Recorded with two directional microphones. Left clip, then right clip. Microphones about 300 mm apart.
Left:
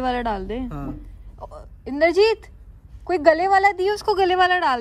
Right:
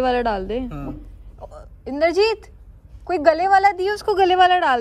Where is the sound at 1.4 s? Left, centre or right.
Centre.